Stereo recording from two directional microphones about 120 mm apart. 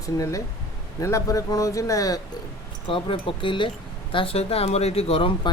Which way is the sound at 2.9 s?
45° left (ahead or behind).